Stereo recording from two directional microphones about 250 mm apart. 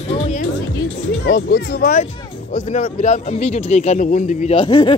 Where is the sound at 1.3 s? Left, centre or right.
Left.